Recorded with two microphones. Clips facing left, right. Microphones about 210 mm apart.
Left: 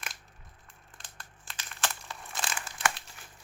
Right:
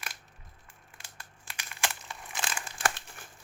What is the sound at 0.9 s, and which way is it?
Crumpling, 10° right (ahead or behind).